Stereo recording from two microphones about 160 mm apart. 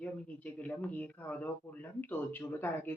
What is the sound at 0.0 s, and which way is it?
Speech, 10° left (ahead or behind).